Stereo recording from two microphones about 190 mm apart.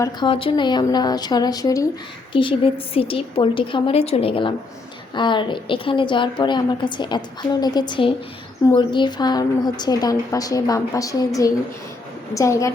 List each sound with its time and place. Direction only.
0.0 s a woman's voice: 25° left (ahead or behind)